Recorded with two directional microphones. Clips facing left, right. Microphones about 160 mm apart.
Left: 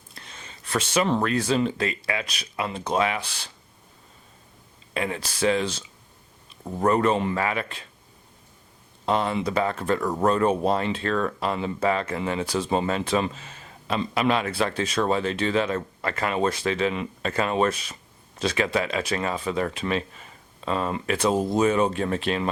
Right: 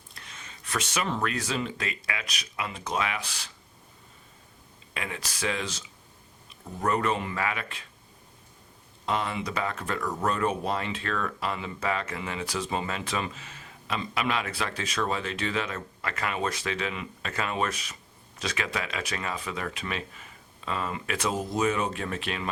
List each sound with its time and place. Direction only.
0.3 s speech: 30° left (ahead or behind)
4.9 s speech: 30° left (ahead or behind)
6.8 s speech: 30° left (ahead or behind)
9.0 s speech: 30° left (ahead or behind)